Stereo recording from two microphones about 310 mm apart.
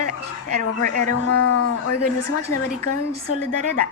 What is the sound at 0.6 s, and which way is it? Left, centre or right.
A woman's voice, left.